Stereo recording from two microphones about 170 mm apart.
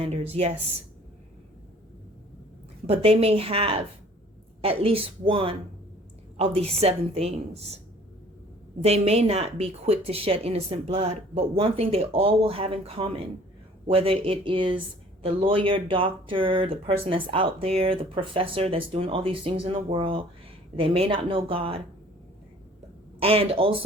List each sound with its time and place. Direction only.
0.0 s speech: 35° right (ahead or behind)
2.8 s speech: 35° right (ahead or behind)
8.8 s speech: 35° right (ahead or behind)
23.2 s speech: 35° right (ahead or behind)